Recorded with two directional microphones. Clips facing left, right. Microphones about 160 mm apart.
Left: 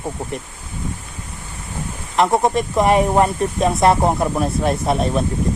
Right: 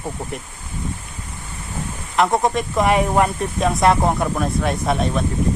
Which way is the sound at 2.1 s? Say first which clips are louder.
Left 2 dB; centre (ahead or behind).